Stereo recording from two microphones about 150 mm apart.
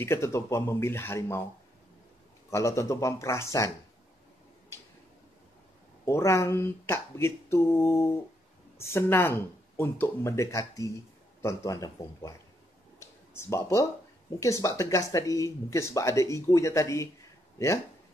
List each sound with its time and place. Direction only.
0.0 s speech: 15° left (ahead or behind)
2.5 s speech: 20° left (ahead or behind)
6.0 s speech: 20° left (ahead or behind)
13.0 s a sound: 20° left (ahead or behind)
14.4 s speech: 20° left (ahead or behind)